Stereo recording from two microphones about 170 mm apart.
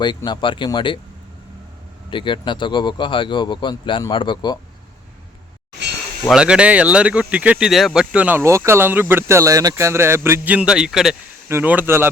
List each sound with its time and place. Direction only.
0.3 s speech: 30° left (ahead or behind)
2.0 s speech: 30° left (ahead or behind)
6.2 s speech: 5° right (ahead or behind)